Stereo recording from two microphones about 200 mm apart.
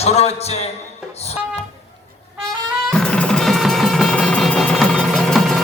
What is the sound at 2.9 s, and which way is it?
Music, 5° left (ahead or behind).